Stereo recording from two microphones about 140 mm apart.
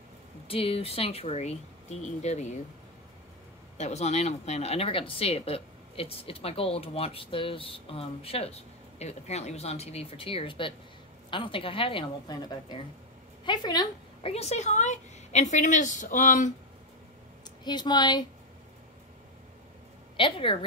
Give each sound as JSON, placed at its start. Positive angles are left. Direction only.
{"t": 0.5, "sound": "speech", "side_deg": 45}
{"t": 3.7, "sound": "a woman's voice", "side_deg": 55}
{"t": 14.2, "sound": "a woman's voice", "side_deg": 50}
{"t": 17.6, "sound": "a woman's voice", "side_deg": 30}
{"t": 20.2, "sound": "a woman's voice", "side_deg": 35}